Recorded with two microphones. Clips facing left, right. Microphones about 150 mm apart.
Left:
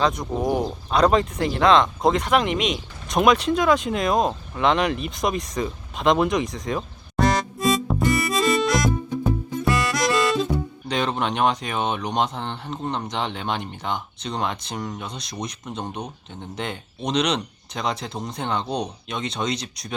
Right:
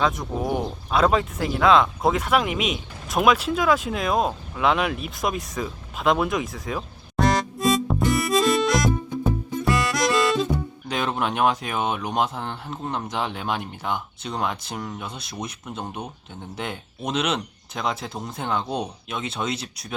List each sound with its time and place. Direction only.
0.0 s speech: centre (ahead or behind)
9.6 s music: centre (ahead or behind)
10.8 s speech: 5° right (ahead or behind)